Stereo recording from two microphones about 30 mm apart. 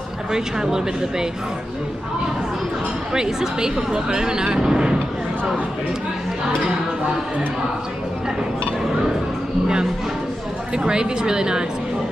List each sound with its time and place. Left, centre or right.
0.3 s speech: centre
3.1 s speech: centre
10.7 s speech: right